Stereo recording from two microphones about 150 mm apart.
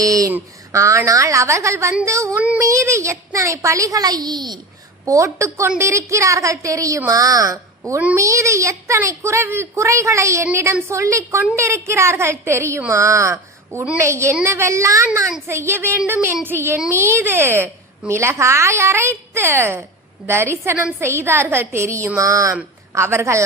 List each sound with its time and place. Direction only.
0.0 s a woman's voice: 25° right (ahead or behind)
2.4 s child singing: 10° right (ahead or behind)
2.6 s a woman's voice: 20° right (ahead or behind)
13.7 s a woman's voice: 10° right (ahead or behind)